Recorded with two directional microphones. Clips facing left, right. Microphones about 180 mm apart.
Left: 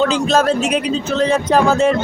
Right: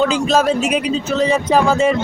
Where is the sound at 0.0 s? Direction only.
5° right (ahead or behind).